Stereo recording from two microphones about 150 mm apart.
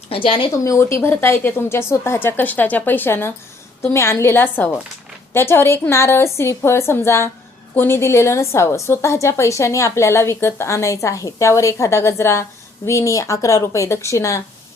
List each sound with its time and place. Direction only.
0.1 s speech: 35° left (ahead or behind)
0.5 s a woman's voice: 20° left (ahead or behind)